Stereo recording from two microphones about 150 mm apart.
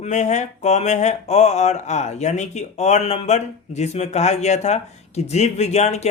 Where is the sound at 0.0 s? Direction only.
50° left (ahead or behind).